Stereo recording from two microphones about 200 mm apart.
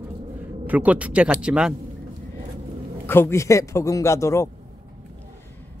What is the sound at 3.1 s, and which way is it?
Speech, 10° left (ahead or behind).